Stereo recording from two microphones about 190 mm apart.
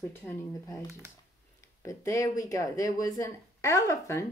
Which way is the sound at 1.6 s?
15° left (ahead or behind).